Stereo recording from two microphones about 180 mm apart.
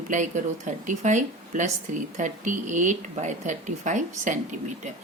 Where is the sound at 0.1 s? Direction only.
45° right (ahead or behind).